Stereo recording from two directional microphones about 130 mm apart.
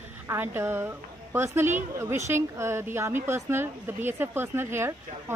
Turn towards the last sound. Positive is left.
turn(degrees=-20)  # may be behind; listen again after turning